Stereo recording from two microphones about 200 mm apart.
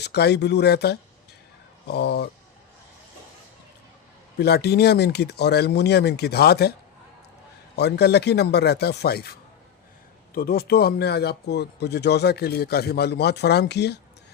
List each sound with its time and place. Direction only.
0.0 s speech: 55° left (ahead or behind)
4.4 s speech: 55° left (ahead or behind)
7.8 s speech: 55° left (ahead or behind)